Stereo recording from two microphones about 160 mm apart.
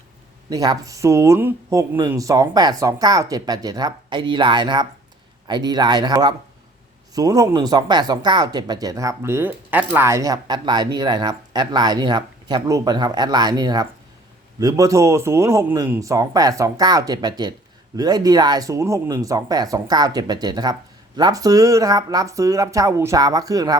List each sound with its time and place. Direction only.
0.5 s speech: 25° right (ahead or behind)